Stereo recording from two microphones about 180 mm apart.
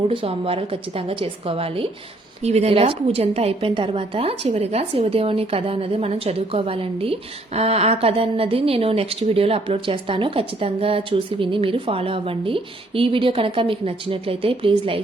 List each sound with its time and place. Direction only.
0.1 s a woman's voice: 30° right (ahead or behind)